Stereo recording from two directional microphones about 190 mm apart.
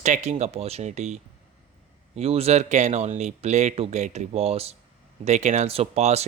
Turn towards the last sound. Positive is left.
turn(degrees=-35)  # may be behind; listen again after turning